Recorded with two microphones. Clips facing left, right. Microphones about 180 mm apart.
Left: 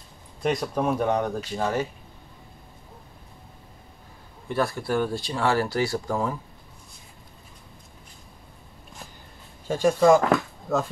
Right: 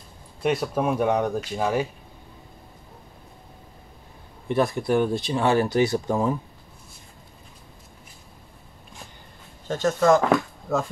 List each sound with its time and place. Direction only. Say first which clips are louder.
0.4 s speech: right 1 dB; 5° right (ahead or behind)
4.5 s speech: right 4 dB; 20° right (ahead or behind)
9.7 s speech: left 1 dB; 10° left (ahead or behind)